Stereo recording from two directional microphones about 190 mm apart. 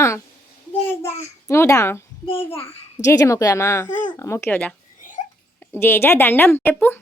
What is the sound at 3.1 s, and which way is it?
Speech, 15° left (ahead or behind).